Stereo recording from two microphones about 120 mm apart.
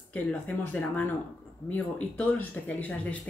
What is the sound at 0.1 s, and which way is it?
A woman's voice, 10° left (ahead or behind).